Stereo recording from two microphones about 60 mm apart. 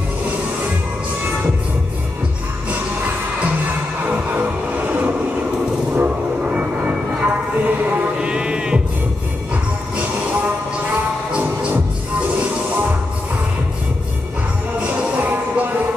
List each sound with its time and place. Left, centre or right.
3.6 s music: right
8.2 s music: centre
12.2 s music: right
14.8 s music: right